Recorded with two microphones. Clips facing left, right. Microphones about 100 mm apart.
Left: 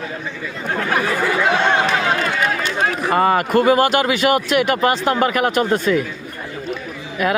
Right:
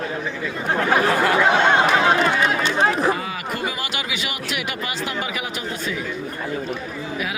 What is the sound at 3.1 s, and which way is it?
Speech, 55° left (ahead or behind).